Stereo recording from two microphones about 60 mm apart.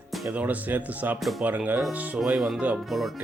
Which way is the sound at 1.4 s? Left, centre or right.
Right.